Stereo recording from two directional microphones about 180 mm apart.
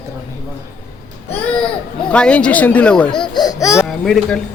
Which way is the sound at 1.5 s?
5° left (ahead or behind).